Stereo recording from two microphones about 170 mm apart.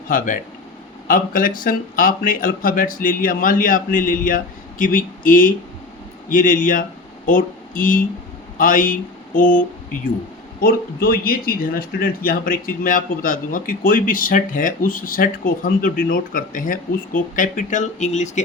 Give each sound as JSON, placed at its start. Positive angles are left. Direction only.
{"t": 0.1, "sound": "speech", "side_deg": 50}